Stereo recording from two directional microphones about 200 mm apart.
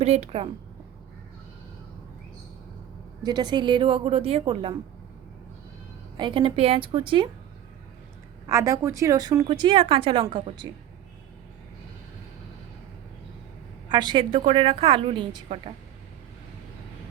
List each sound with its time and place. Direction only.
0.0 s a woman's voice: 30° right (ahead or behind)
3.2 s a woman's voice: 20° right (ahead or behind)
6.1 s a woman's voice: 25° right (ahead or behind)
8.4 s a woman's voice: 15° right (ahead or behind)
13.8 s a woman's voice: 25° right (ahead or behind)